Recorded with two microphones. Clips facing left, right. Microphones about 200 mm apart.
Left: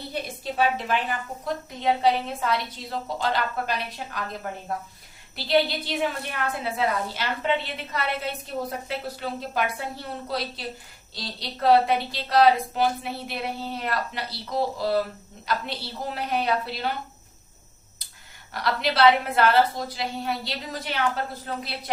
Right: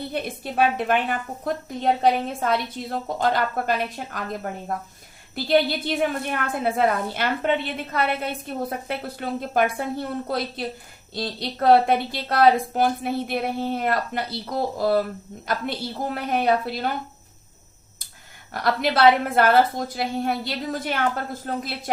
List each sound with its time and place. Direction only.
0.1 s a woman's voice: 55° right (ahead or behind)
18.5 s a woman's voice: 50° right (ahead or behind)